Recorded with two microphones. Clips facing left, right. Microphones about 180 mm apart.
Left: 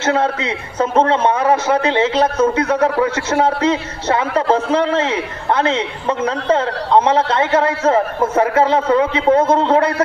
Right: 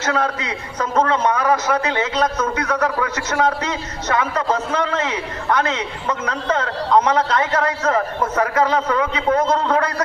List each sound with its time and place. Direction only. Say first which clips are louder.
0.0 s a man's voice: left 4 dB; 25° left (ahead or behind)